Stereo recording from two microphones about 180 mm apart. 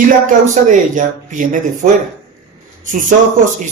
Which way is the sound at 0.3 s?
45° right (ahead or behind).